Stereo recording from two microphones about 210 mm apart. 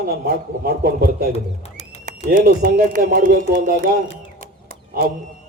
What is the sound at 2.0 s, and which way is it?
Speech, 40° right (ahead or behind).